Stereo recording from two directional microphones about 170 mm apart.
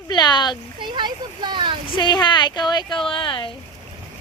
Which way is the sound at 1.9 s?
25° left (ahead or behind).